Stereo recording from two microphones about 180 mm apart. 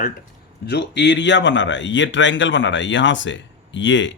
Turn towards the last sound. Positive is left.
turn(degrees=90)